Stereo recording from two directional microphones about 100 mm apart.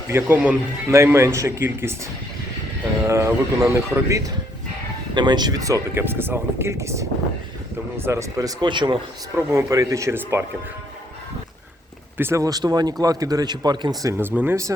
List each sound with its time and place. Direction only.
0.1 s speech: 20° right (ahead or behind)
3.0 s speech: 30° right (ahead or behind)
5.1 s a man's voice: 45° right (ahead or behind)
6.0 s a man's voice: 20° right (ahead or behind)
8.7 s speech: 50° right (ahead or behind)
9.3 s speech: 25° right (ahead or behind)
12.1 s a man's voice: 25° right (ahead or behind)
14.2 s speech: 20° right (ahead or behind)